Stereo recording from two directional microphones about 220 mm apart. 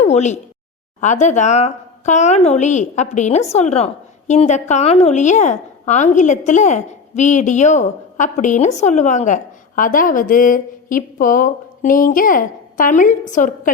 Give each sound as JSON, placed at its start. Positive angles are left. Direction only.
{"t": 0.0, "sound": "a woman's voice", "side_deg": 30}